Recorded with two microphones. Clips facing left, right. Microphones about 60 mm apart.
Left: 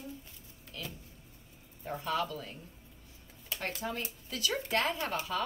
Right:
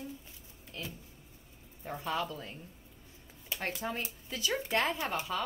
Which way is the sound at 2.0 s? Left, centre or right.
Right.